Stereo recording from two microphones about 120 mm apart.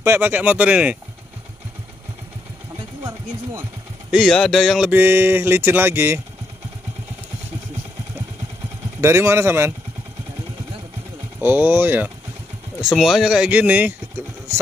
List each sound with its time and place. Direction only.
0.0 s speech: 15° right (ahead or behind)
4.1 s speech: centre (ahead or behind); by 6.2 s 20° right (ahead or behind)
9.0 s speech: 20° right (ahead or behind)
11.4 s speech: 15° right (ahead or behind)
12.9 s speech: centre (ahead or behind)